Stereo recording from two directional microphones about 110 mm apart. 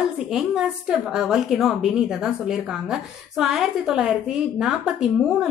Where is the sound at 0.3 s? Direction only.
5° right (ahead or behind).